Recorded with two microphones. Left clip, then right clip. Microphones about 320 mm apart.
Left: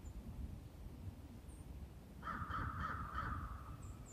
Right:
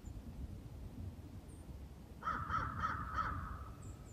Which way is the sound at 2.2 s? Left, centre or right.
Right.